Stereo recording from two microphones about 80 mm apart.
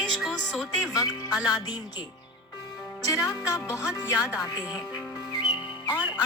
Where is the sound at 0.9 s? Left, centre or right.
Left.